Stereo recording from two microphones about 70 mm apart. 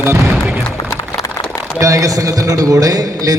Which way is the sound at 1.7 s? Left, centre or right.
Right.